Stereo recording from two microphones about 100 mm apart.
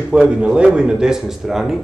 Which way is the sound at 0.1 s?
10° right (ahead or behind).